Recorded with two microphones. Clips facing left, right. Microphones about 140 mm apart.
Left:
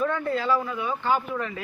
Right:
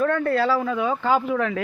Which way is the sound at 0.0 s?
65° right (ahead or behind).